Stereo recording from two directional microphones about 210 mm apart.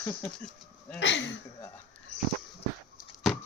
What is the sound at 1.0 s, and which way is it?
Speech, 60° left (ahead or behind).